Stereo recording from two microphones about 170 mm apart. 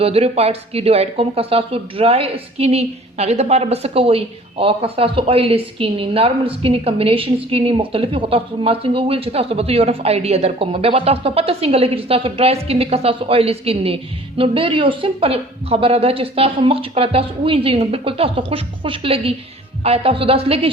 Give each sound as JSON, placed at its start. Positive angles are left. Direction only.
{"t": 0.0, "sound": "a woman's voice", "side_deg": -35}